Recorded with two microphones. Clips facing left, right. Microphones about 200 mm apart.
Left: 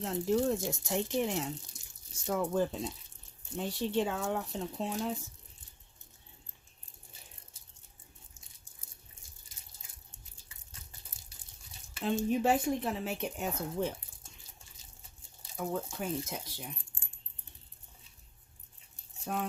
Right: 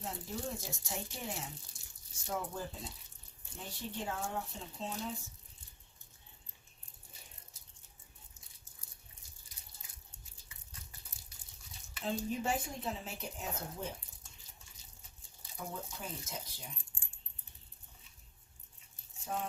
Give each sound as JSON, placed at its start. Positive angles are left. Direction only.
{"t": 0.0, "sound": "speech", "side_deg": 85}
{"t": 1.7, "sound": "water tap", "side_deg": 15}
{"t": 2.2, "sound": "speech", "side_deg": 80}
{"t": 12.3, "sound": "speech", "side_deg": 70}
{"t": 15.5, "sound": "speech", "side_deg": 80}
{"t": 19.2, "sound": "speech", "side_deg": 70}